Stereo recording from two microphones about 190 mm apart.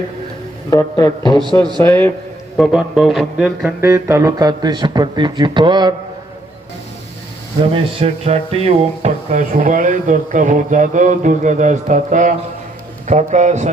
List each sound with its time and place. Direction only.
0.7 s speech: 20° left (ahead or behind)
2.6 s a sound: 5° right (ahead or behind); by 5.9 s 25° right (ahead or behind)
7.6 s speech: 35° right (ahead or behind)